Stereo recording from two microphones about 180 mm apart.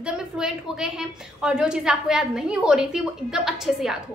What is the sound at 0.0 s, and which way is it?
A woman's voice, 5° right (ahead or behind).